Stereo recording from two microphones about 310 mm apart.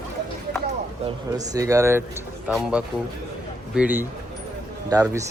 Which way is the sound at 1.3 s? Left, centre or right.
Centre.